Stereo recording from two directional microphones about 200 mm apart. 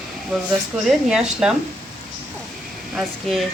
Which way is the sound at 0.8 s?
Centre (ahead or behind).